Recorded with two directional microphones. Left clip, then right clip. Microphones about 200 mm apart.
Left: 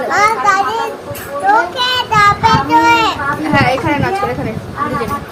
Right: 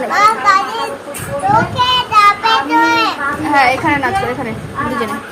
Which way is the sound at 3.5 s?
15° right (ahead or behind).